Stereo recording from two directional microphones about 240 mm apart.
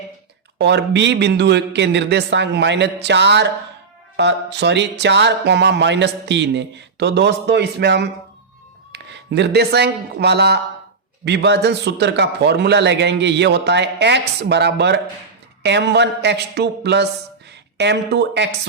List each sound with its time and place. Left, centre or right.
0.6 s speech: right